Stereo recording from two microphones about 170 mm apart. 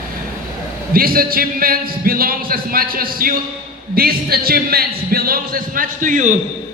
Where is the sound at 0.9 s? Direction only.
60° right (ahead or behind).